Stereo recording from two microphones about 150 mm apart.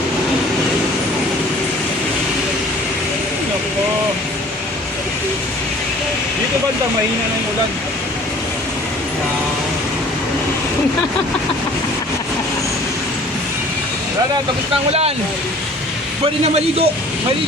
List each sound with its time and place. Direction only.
16.2 s speech: 40° right (ahead or behind)